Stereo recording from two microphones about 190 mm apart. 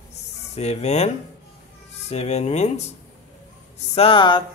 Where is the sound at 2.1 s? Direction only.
35° left (ahead or behind).